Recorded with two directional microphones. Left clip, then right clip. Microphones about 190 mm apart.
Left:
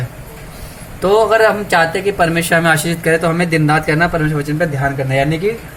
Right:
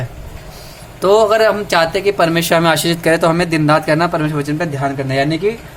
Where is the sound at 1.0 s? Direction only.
35° right (ahead or behind).